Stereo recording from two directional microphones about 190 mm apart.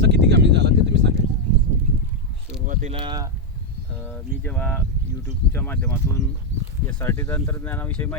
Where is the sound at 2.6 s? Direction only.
40° right (ahead or behind).